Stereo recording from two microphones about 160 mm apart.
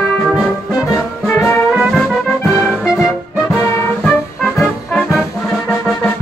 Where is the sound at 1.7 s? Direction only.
5° right (ahead or behind).